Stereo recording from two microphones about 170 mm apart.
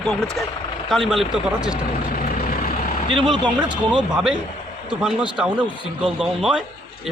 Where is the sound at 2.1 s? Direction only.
55° left (ahead or behind).